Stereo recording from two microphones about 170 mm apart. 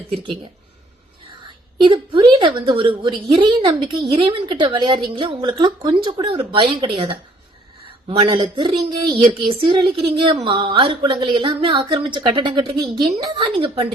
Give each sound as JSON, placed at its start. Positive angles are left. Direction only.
{"t": 0.1, "sound": "speech", "side_deg": -25}
{"t": 1.8, "sound": "speech", "side_deg": -30}